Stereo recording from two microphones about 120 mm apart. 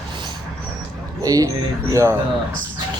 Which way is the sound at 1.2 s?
30° right (ahead or behind).